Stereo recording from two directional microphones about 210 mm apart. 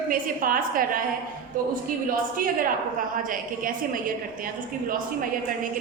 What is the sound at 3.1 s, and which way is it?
A woman's voice, 40° right (ahead or behind).